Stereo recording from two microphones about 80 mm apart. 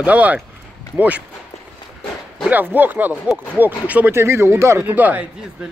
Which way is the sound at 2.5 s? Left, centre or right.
Right.